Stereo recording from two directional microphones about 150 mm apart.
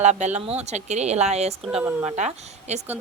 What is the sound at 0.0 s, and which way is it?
A woman's voice, 50° right (ahead or behind).